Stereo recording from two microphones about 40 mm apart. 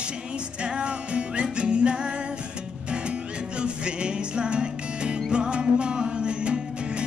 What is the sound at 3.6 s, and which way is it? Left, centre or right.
Music, right.